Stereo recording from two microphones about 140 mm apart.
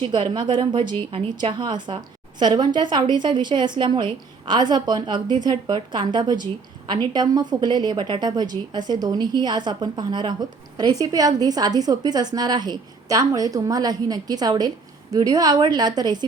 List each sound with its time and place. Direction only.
0.0 s a woman's voice: 35° right (ahead or behind)